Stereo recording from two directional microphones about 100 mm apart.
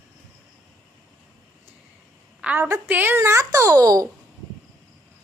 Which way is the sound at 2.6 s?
30° right (ahead or behind).